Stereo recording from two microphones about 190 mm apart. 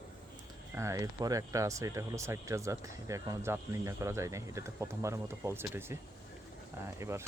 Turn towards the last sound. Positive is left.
turn(degrees=-15)  # may be behind; listen again after turning